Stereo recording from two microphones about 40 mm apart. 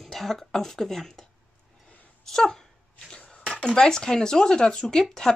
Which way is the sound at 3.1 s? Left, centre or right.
Centre.